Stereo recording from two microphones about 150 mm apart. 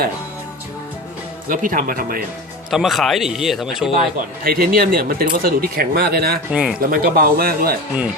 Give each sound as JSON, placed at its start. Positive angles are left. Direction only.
{"t": 1.5, "sound": "speech", "side_deg": -70}
{"t": 2.6, "sound": "a man's voice", "side_deg": 0}
{"t": 4.4, "sound": "speech", "side_deg": -75}
{"t": 6.5, "sound": "speech", "side_deg": -5}
{"t": 6.7, "sound": "speech", "side_deg": -70}